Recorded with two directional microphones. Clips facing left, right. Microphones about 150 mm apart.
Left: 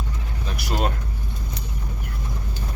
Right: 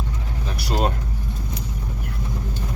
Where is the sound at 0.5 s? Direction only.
30° right (ahead or behind).